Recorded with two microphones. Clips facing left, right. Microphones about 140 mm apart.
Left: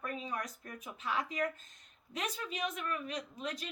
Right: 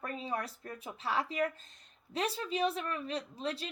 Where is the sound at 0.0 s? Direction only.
30° right (ahead or behind).